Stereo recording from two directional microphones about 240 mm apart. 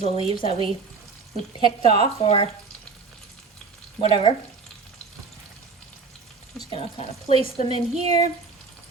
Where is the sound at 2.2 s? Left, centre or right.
Left.